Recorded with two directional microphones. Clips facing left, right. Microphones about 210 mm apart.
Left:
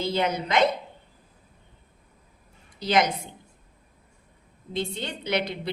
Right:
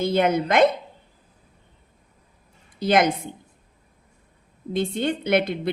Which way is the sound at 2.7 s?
55° right (ahead or behind).